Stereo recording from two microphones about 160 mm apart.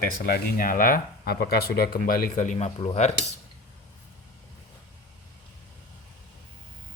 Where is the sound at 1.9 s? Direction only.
55° left (ahead or behind).